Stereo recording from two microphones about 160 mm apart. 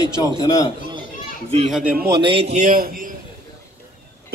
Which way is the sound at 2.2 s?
35° right (ahead or behind).